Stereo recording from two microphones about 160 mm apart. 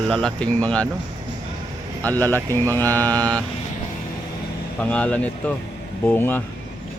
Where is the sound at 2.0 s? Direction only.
10° left (ahead or behind).